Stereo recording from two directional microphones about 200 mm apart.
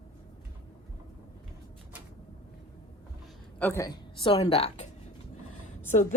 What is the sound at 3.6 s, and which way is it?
Speech, 10° left (ahead or behind).